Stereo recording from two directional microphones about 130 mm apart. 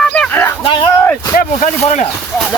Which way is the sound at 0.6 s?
40° left (ahead or behind).